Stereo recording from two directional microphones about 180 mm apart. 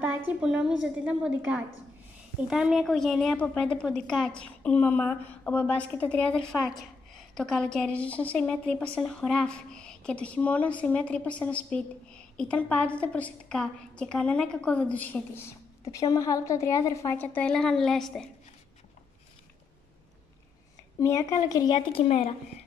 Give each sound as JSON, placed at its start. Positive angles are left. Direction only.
{"t": 0.3, "sound": "a woman's voice", "side_deg": -5}
{"t": 21.0, "sound": "a woman's voice", "side_deg": 15}